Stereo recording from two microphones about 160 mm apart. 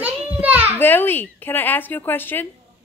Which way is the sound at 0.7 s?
10° left (ahead or behind).